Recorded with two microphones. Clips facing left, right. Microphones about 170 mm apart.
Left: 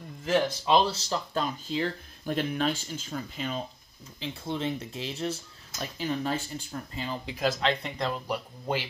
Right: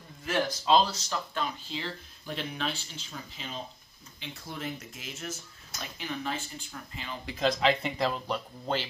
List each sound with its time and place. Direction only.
0.3 s speech: 20° left (ahead or behind); by 3.5 s 50° left (ahead or behind)
4.2 s speech: 25° left (ahead or behind)
7.2 s speech: 10° left (ahead or behind)
7.6 s speech: centre (ahead or behind)
8.3 s speech: 10° left (ahead or behind)